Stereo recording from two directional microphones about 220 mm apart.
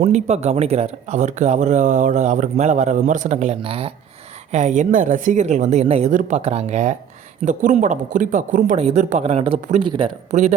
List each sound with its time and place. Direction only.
0.0 s speech: 30° right (ahead or behind)
10.3 s speech: 30° right (ahead or behind)